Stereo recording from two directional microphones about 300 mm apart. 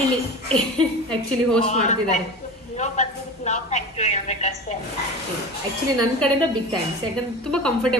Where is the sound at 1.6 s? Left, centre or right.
Left.